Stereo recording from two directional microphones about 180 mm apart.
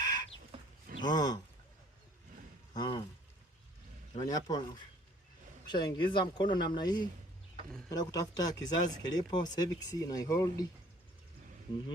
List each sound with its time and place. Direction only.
0.0 s chicken: 20° left (ahead or behind)
1.0 s speech: 20° left (ahead or behind)
2.7 s speech: 25° left (ahead or behind)
4.2 s speech: 20° left (ahead or behind)
5.6 s speech: 25° left (ahead or behind)